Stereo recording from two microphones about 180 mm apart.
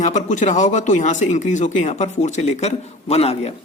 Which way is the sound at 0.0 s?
40° left (ahead or behind).